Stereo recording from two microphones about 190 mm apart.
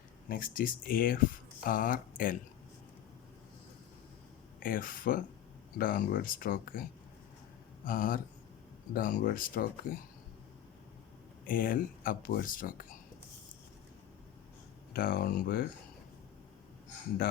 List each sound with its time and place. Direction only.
0.3 s speech: 45° left (ahead or behind)
4.6 s speech: 45° left (ahead or behind)
7.9 s speech: 50° left (ahead or behind)
11.4 s speech: 50° left (ahead or behind)
14.9 s speech: 50° left (ahead or behind)